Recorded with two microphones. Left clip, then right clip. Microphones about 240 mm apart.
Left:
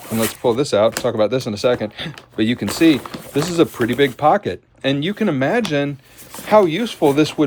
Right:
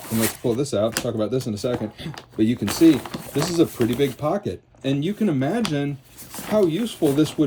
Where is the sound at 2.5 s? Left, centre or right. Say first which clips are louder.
Left 2 dB; centre.